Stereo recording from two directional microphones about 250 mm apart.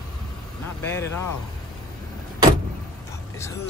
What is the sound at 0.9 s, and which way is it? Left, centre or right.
Speech, centre.